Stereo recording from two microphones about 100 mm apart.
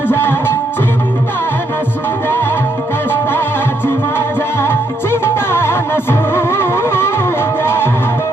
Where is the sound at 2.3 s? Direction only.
20° left (ahead or behind).